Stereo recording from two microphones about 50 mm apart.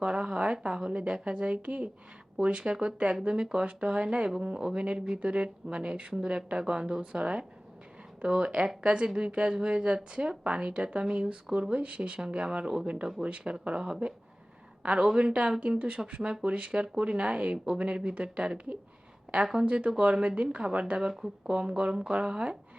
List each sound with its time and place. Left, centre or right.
0.0 s a woman's voice: centre
21.1 s speech: centre
21.5 s speech: right